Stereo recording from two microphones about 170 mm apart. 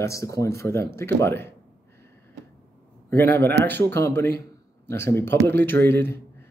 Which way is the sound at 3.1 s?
15° left (ahead or behind).